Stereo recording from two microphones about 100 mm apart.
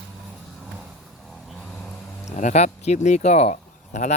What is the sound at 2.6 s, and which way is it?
Speech, 90° left.